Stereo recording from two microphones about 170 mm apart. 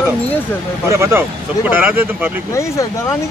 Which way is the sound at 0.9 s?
15° right (ahead or behind).